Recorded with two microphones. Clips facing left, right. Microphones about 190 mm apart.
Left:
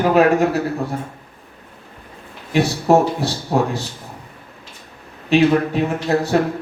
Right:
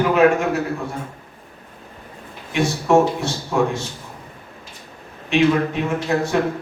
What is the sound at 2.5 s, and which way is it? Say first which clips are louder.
A man's voice: left 1 dB; 35° left (ahead or behind).